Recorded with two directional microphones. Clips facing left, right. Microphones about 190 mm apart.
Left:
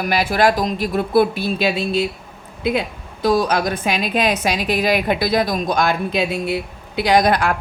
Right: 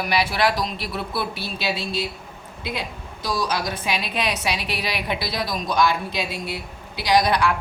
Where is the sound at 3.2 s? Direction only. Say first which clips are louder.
Left 8 dB; 55° left (ahead or behind).